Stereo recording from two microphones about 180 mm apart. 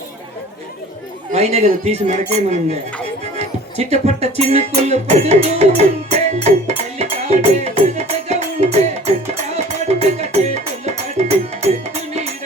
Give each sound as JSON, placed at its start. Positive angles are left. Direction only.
{"t": 1.3, "sound": "speech", "side_deg": -35}
{"t": 3.3, "sound": "music", "side_deg": -35}